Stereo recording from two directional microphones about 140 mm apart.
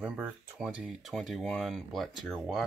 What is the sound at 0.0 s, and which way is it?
Speech, 10° right (ahead or behind).